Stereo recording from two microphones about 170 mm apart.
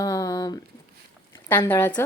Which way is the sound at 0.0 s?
20° left (ahead or behind).